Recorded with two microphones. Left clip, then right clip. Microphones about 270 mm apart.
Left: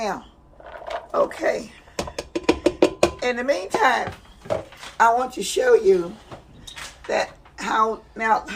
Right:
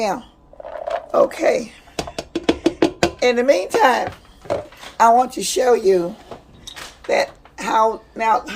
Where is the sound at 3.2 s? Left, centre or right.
Right.